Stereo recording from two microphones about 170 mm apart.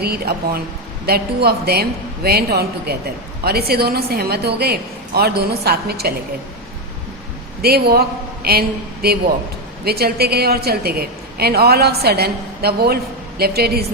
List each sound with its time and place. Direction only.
0.0 s a woman's voice: 65° right (ahead or behind)
7.6 s a man's voice: 65° right (ahead or behind)